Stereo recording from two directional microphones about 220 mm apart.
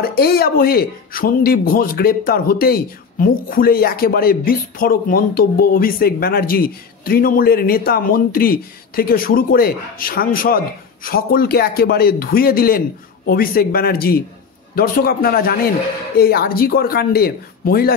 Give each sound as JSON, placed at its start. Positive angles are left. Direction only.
{"t": 0.0, "sound": "speech", "side_deg": 45}